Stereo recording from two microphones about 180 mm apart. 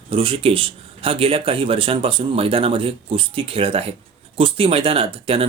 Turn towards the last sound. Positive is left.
turn(degrees=-30)  # may be behind; listen again after turning